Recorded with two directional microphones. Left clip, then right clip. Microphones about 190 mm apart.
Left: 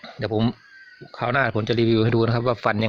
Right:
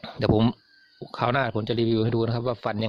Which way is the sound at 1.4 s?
15° right (ahead or behind).